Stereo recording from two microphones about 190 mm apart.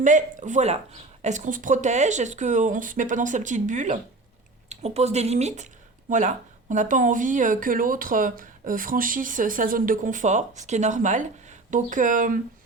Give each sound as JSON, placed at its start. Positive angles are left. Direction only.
{"t": 0.0, "sound": "speech", "side_deg": -40}